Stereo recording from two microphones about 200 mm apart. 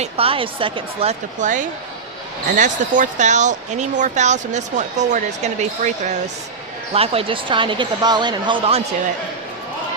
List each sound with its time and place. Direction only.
0.0 s speech: 30° right (ahead or behind)
1.4 s speech: 40° right (ahead or behind)